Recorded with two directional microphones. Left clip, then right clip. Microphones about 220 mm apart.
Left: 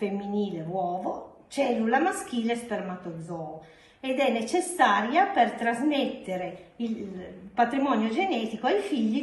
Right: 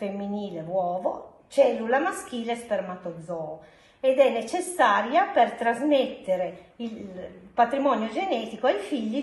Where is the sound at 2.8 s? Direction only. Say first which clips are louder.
Right 2 dB; centre (ahead or behind).